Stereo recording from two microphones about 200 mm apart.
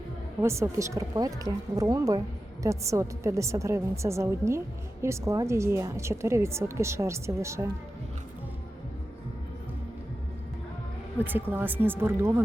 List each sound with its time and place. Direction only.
0.4 s a woman's voice: 15° right (ahead or behind)
11.2 s a woman's voice: 10° right (ahead or behind)